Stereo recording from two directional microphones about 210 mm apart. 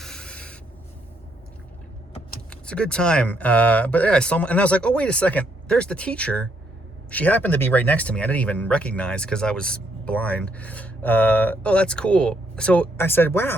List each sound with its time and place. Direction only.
0.0 s writing: 5° left (ahead or behind)
2.5 s speech: 5° left (ahead or behind)